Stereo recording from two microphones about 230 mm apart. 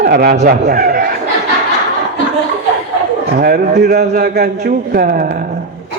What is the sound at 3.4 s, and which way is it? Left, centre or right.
A man's voice, right.